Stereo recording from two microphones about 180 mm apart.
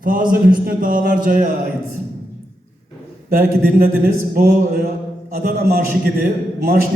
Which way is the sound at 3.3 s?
55° right (ahead or behind).